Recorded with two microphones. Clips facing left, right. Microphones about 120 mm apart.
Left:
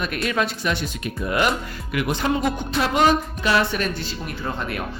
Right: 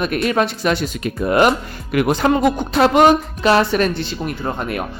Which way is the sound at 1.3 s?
50° right (ahead or behind).